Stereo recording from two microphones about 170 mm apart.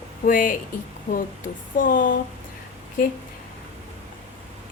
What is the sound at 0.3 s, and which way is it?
Speech, 55° left (ahead or behind).